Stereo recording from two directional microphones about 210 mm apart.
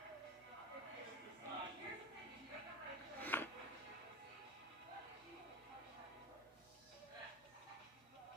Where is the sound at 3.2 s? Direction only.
10° left (ahead or behind).